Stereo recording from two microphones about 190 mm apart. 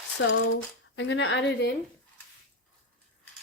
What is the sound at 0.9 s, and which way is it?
Female singing, 85° left.